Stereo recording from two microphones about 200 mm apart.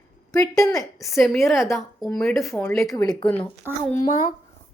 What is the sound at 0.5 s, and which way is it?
Speech, 15° left (ahead or behind).